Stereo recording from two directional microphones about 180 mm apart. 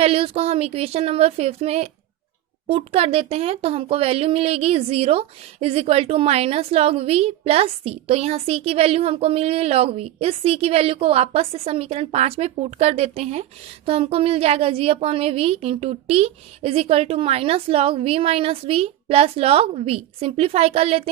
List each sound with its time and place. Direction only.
0.0 s speech: 35° right (ahead or behind)